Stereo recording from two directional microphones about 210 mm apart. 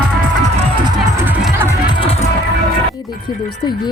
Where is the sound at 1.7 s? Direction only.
20° left (ahead or behind).